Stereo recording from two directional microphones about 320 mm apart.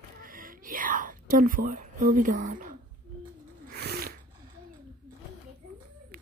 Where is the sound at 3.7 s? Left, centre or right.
Right.